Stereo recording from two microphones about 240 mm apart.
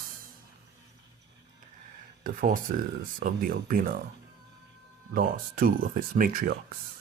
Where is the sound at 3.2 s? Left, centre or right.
Right.